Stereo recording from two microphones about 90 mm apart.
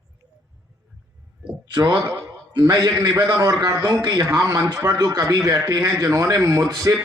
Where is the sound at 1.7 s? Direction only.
45° right (ahead or behind); by 4.5 s 30° right (ahead or behind).